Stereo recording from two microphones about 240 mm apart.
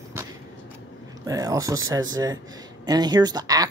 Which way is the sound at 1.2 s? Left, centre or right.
Centre.